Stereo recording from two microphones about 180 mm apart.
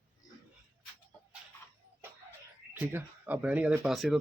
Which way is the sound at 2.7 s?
10° right (ahead or behind).